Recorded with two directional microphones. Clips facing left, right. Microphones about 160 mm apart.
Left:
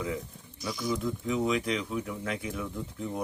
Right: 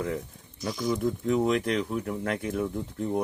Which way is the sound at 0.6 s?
45° right (ahead or behind).